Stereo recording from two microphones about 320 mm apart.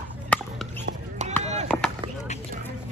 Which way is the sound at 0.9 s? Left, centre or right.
Right.